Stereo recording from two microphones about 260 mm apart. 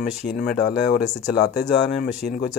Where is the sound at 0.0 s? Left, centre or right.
Left.